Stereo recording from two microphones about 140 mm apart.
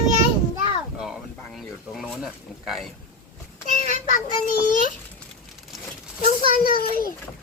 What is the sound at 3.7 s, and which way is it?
Child singing, 70° left (ahead or behind).